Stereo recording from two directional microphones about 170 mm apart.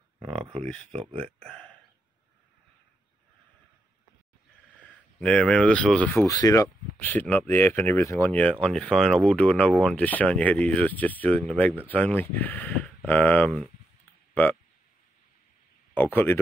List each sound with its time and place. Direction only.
0.6 s speech: 5° left (ahead or behind)
0.9 s speech: 35° right (ahead or behind)
1.4 s a sound: 5° left (ahead or behind)
4.8 s speech: 5° left (ahead or behind)
6.2 s speech: 20° left (ahead or behind)
15.9 s speech: 10° left (ahead or behind)